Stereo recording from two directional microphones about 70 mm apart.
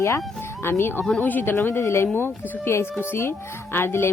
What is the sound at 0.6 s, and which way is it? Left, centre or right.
Speech, left.